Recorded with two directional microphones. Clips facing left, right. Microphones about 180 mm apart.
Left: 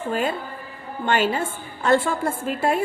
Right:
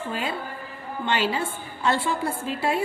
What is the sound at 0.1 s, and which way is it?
A woman's voice, 50° left (ahead or behind).